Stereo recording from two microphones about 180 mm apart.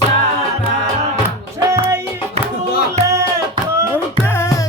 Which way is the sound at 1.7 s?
15° right (ahead or behind).